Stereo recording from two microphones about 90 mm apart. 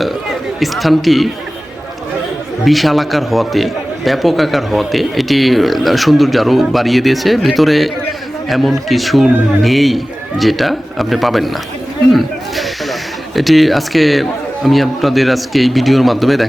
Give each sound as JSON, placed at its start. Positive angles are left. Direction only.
{"t": 0.6, "sound": "a man's voice", "side_deg": 0}
{"t": 2.6, "sound": "a man's voice", "side_deg": 0}